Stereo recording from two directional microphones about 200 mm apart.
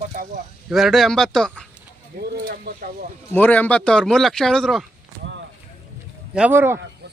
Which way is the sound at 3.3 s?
10° left (ahead or behind).